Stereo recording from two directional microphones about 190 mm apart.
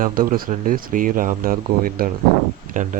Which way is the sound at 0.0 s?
50° right (ahead or behind).